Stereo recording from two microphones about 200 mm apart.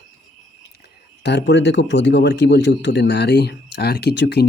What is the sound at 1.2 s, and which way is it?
Speech, 60° left (ahead or behind).